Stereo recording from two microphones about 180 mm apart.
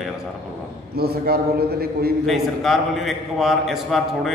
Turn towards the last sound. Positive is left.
turn(degrees=0)  # may be behind; listen again after turning